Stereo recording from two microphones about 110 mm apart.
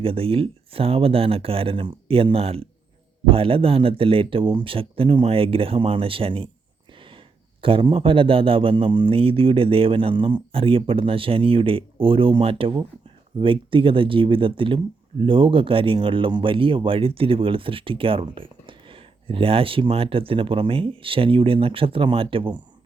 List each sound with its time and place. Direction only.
0.0 s speech: 60° right (ahead or behind)
7.6 s speech: 55° right (ahead or behind)